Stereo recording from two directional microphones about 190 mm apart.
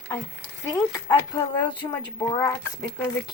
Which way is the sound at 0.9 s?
20° left (ahead or behind).